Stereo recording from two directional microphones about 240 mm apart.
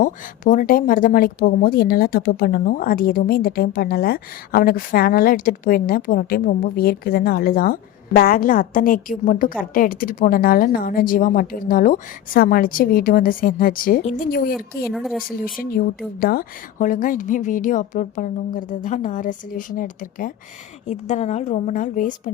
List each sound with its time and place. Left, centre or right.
0.0 s speech: left
14.9 s speech: centre
15.5 s speech: left